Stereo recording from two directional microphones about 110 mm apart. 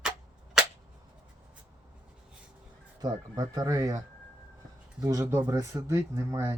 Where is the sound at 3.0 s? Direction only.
35° right (ahead or behind).